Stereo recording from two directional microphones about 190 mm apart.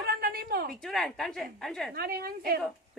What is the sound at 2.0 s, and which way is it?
Speech, 55° right (ahead or behind).